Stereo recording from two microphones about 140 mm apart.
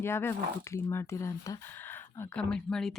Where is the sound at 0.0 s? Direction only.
15° left (ahead or behind).